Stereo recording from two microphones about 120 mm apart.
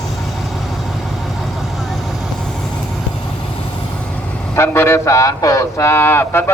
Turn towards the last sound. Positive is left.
turn(degrees=20)  # may be behind; listen again after turning